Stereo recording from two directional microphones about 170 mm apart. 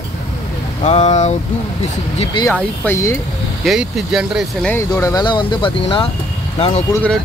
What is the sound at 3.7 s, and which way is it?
Speech, 5° right (ahead or behind).